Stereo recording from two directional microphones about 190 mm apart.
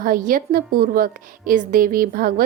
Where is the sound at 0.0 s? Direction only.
45° right (ahead or behind).